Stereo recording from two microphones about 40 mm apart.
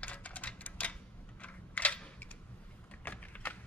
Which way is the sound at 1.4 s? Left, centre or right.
Left.